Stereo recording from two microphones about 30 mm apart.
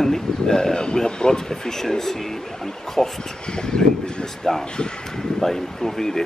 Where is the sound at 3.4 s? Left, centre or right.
Left.